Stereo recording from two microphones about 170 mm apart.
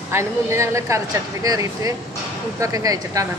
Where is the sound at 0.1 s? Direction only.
15° right (ahead or behind).